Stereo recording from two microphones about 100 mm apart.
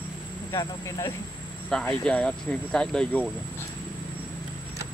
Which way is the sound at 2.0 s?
10° left (ahead or behind).